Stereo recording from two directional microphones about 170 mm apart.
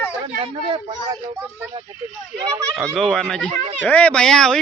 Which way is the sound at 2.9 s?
Centre (ahead or behind).